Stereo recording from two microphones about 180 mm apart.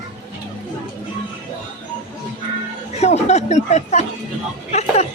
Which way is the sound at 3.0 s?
40° left (ahead or behind).